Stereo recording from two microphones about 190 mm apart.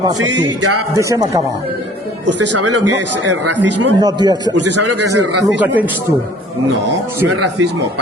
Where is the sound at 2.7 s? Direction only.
70° right (ahead or behind).